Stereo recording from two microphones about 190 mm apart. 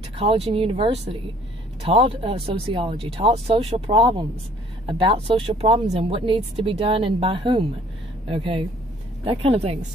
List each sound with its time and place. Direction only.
0.2 s speech: 30° right (ahead or behind)